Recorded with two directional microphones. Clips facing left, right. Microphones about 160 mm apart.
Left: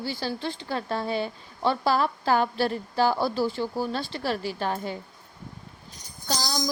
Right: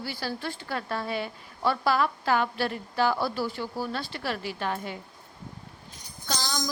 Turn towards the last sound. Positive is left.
turn(degrees=40)  # may be behind; listen again after turning